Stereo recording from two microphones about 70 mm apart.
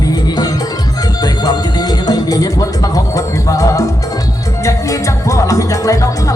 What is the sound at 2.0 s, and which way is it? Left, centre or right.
Music, left.